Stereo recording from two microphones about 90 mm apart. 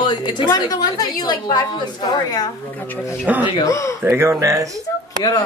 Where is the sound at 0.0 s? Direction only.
55° left (ahead or behind).